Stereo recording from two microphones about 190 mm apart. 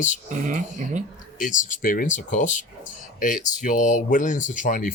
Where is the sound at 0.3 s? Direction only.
40° right (ahead or behind).